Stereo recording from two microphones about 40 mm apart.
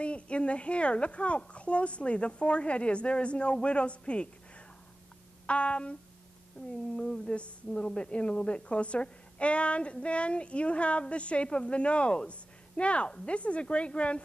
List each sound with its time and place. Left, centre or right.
0.0 s a woman's voice: left
5.5 s a sound: left
6.6 s speech: left
7.0 s a woman's voice: left